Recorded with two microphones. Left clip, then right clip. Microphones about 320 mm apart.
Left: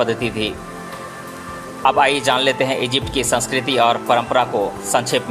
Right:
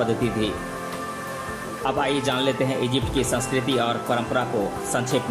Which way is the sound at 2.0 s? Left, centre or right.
Centre.